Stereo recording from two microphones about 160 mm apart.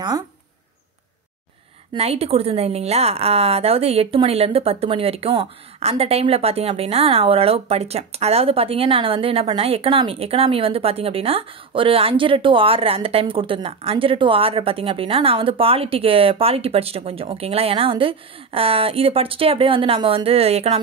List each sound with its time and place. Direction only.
2.0 s a woman's voice: 40° right (ahead or behind)